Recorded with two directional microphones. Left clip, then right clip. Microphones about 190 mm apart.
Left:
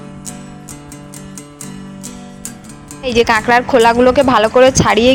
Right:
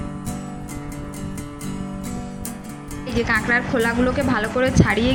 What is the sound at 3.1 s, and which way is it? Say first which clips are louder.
A woman's voice: left 9 dB; 45° left (ahead or behind).